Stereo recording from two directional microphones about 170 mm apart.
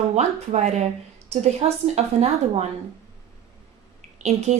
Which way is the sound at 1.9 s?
40° right (ahead or behind).